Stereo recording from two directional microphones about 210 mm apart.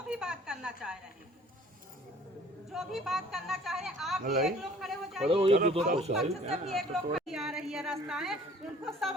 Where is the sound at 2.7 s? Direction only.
Centre (ahead or behind).